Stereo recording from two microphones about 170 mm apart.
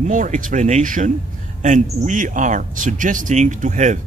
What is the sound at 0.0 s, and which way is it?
Speech, 45° right (ahead or behind).